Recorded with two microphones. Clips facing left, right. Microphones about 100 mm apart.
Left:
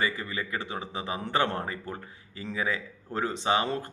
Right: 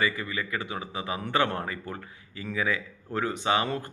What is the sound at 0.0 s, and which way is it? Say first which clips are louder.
A man's voice: right 2 dB; 30° left (ahead or behind).